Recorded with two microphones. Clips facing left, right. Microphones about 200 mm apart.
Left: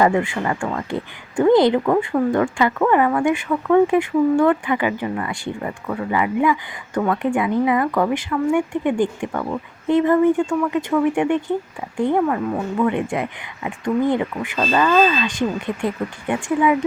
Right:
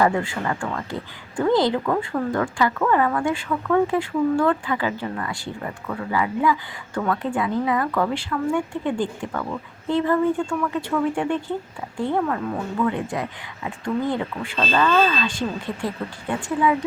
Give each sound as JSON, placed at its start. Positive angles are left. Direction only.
{"t": 0.0, "sound": "speech", "side_deg": 20}
{"t": 2.1, "sound": "speech", "side_deg": 15}
{"t": 9.0, "sound": "speech", "side_deg": 20}